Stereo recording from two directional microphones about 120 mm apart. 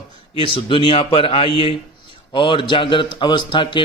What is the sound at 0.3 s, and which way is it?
A man's voice, 45° left (ahead or behind).